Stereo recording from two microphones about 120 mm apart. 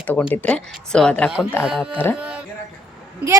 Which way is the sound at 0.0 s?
10° left (ahead or behind).